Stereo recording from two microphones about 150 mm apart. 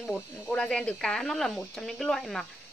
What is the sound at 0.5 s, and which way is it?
Speech, 5° left (ahead or behind).